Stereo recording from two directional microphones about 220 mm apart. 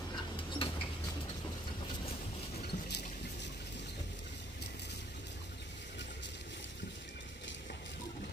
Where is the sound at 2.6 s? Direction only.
45° left (ahead or behind).